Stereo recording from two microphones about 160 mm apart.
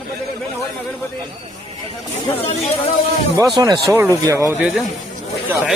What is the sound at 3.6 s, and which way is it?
Speech, 25° right (ahead or behind).